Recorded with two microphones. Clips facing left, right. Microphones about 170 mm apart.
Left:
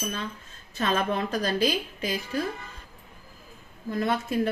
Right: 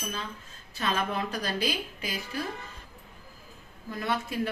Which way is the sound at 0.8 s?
40° left (ahead or behind).